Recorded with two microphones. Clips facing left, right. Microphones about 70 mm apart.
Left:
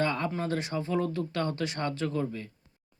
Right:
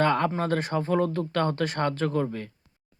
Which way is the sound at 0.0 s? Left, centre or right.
Right.